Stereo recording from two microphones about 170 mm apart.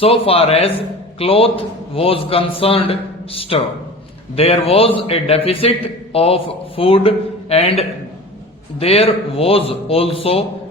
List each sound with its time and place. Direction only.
0.0 s a man's voice: 35° left (ahead or behind)